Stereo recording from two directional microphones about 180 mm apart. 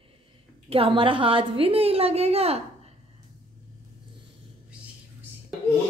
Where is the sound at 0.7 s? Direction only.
30° right (ahead or behind).